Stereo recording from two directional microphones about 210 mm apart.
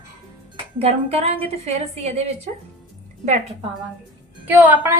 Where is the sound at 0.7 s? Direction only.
30° right (ahead or behind).